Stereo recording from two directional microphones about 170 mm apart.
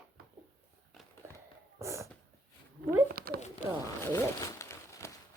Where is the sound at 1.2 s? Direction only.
15° right (ahead or behind).